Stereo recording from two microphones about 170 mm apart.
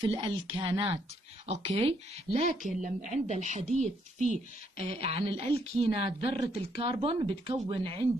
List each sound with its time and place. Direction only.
0.0 s speech: 30° right (ahead or behind)